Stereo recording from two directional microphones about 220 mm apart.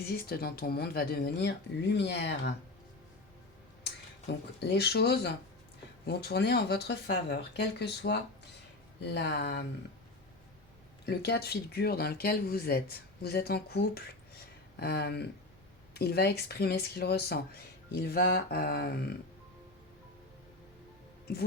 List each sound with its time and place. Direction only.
0.1 s speech: 45° left (ahead or behind)
3.8 s speech: 50° left (ahead or behind)
11.0 s speech: 45° left (ahead or behind)